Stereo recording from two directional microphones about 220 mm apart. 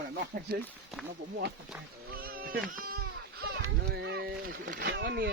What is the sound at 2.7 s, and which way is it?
Speech, 40° right (ahead or behind).